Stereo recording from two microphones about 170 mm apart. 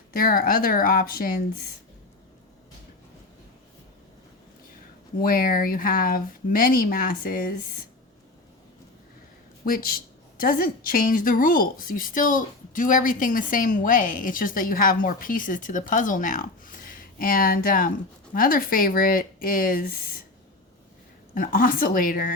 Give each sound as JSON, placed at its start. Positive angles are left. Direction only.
{"t": 0.1, "sound": "speech", "side_deg": 60}
{"t": 5.2, "sound": "speech", "side_deg": 55}
{"t": 9.6, "sound": "a woman's voice", "side_deg": 55}
{"t": 21.3, "sound": "speech", "side_deg": 55}